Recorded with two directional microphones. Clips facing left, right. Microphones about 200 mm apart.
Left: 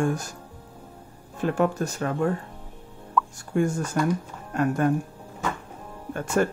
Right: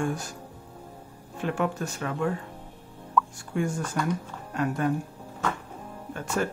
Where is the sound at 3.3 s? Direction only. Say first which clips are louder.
Left 5 dB; 45° left (ahead or behind).